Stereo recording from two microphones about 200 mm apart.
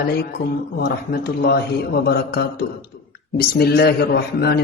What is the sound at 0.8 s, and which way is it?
A man's voice, 50° left (ahead or behind).